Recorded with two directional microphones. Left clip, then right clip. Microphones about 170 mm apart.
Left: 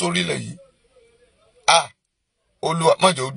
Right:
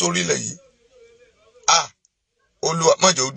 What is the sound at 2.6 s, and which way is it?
Speech, 25° left (ahead or behind).